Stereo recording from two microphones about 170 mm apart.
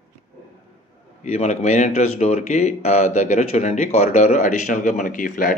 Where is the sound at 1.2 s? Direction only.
40° left (ahead or behind).